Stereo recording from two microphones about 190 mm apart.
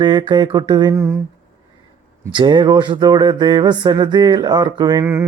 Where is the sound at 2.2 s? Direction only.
25° right (ahead or behind).